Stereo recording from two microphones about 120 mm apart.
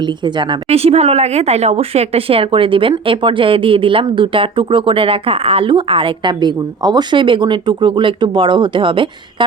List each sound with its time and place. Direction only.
0.0 s a woman's voice: 40° right (ahead or behind)
0.7 s speech: 60° right (ahead or behind)